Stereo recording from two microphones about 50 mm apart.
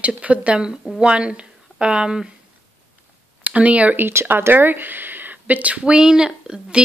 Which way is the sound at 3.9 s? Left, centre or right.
Right.